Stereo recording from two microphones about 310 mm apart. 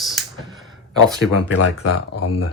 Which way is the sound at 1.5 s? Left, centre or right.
Left.